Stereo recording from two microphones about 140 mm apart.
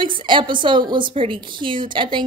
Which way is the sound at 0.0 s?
35° right (ahead or behind).